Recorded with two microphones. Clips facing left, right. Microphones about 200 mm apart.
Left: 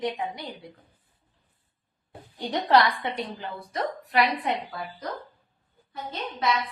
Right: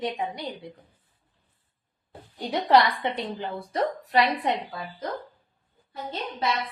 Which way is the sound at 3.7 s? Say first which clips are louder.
Right 2 dB; 30° right (ahead or behind).